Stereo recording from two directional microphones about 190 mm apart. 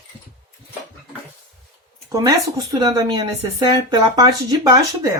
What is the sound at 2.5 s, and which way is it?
Speech, 20° right (ahead or behind).